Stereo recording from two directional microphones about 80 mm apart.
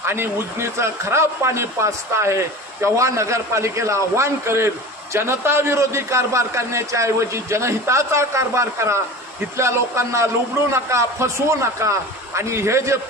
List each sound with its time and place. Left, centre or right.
0.0 s speech: right